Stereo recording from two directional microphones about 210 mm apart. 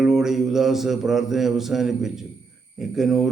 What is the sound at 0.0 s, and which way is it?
Mantra, centre (ahead or behind).